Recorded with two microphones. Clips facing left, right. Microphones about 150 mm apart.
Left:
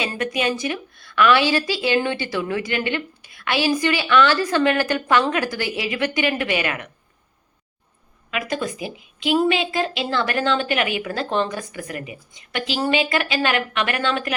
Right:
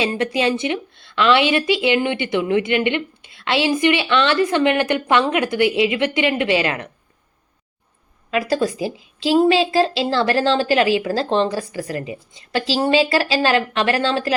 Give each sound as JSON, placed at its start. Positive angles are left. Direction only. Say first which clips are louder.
{"t": 0.0, "sound": "a woman's voice", "louder": "right 4 dB", "side_deg": -30}
{"t": 8.3, "sound": "a woman's voice", "louder": "right 6 dB", "side_deg": -35}